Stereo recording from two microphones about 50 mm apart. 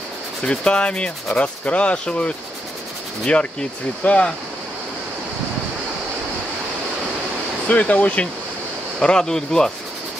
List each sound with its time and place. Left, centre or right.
0.4 s speech: left
4.0 s speech: left
7.6 s speech: left
9.0 s speech: centre